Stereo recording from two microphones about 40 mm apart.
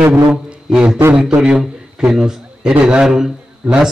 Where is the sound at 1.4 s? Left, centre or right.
Centre.